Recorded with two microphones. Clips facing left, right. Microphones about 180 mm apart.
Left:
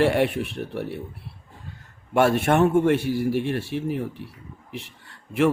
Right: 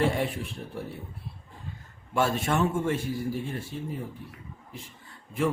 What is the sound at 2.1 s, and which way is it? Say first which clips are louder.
Speech: left 7 dB; 65° left (ahead or behind).